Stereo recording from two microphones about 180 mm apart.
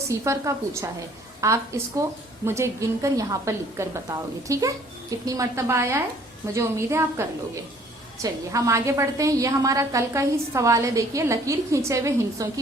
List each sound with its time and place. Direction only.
0.1 s a woman's voice: 15° right (ahead or behind)